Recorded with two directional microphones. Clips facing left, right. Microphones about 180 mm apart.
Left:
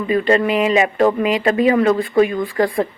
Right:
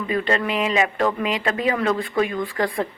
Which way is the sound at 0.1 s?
35° left (ahead or behind).